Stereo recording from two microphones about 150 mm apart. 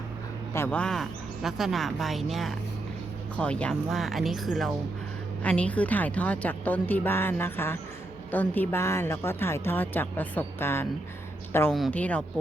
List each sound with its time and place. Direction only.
0.5 s a woman's voice: 15° left (ahead or behind)
11.7 s speech: 5° left (ahead or behind)